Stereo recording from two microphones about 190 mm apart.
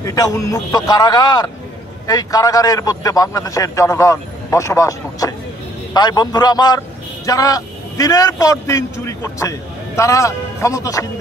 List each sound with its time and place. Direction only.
0.0 s a man's voice: 15° left (ahead or behind)